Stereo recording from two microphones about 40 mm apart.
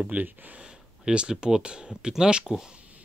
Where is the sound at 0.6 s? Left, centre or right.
Centre.